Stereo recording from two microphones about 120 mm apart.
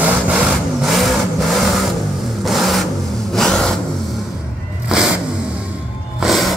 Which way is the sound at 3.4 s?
5° left (ahead or behind).